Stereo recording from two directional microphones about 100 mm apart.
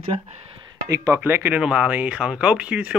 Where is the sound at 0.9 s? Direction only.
30° right (ahead or behind).